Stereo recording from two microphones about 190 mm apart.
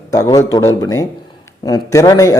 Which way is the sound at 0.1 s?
20° left (ahead or behind).